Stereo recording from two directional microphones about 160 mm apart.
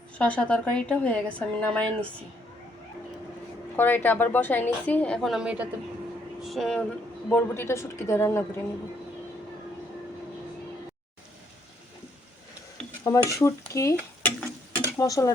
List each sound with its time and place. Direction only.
0.2 s a woman's voice: 5° left (ahead or behind)
3.8 s a woman's voice: 10° left (ahead or behind)
13.1 s speech: 20° left (ahead or behind)
13.9 s stir: 10° left (ahead or behind)